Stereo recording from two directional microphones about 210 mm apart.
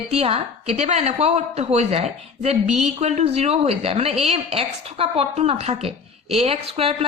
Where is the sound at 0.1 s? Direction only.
30° right (ahead or behind).